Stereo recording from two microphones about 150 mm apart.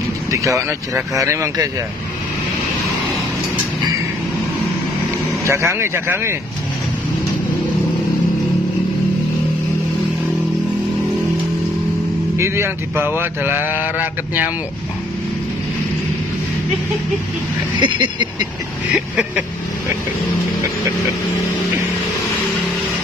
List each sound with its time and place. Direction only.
0.3 s speech: 20° right (ahead or behind)
5.4 s speech: 20° right (ahead or behind)
12.4 s speech: 15° right (ahead or behind)
17.9 s a sound: 30° right (ahead or behind)
18.9 s speech: 10° right (ahead or behind)